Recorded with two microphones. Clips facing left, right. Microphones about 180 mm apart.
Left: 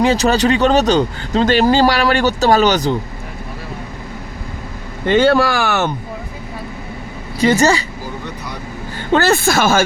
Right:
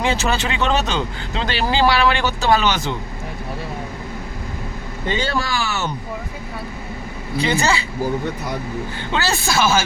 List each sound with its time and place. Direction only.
0.0 s speech: 40° left (ahead or behind)
5.0 s speech: 65° left (ahead or behind)
7.4 s speech: 45° left (ahead or behind)
9.1 s speech: 55° left (ahead or behind)